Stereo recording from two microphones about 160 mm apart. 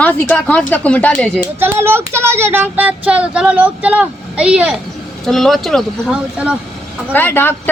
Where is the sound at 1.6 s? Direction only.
15° right (ahead or behind).